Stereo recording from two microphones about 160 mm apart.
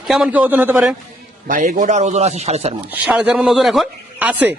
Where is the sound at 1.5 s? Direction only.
55° right (ahead or behind).